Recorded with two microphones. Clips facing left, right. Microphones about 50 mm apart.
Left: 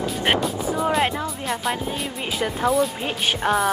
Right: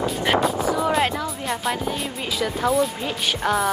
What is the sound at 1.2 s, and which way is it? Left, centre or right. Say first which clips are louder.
Speech: even; centre.